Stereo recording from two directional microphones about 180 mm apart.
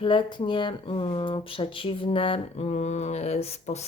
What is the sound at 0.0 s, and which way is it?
Speech, 25° left (ahead or behind).